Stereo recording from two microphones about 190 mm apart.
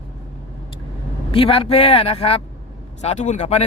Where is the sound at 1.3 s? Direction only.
30° left (ahead or behind).